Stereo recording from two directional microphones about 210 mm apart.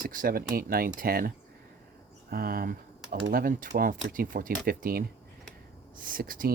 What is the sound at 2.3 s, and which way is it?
Speech, 45° right (ahead or behind).